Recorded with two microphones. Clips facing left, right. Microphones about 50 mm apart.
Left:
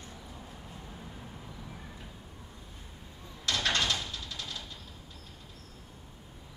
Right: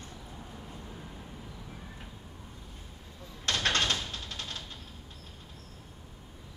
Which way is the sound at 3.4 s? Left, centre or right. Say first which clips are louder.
Right 1 dB; right.